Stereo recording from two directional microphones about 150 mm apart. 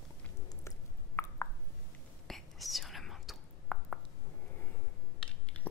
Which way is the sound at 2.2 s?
Centre (ahead or behind).